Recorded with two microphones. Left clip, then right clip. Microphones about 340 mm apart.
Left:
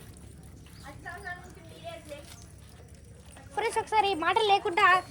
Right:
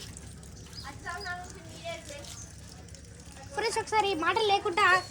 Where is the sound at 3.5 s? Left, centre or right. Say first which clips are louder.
Left 1 dB; left.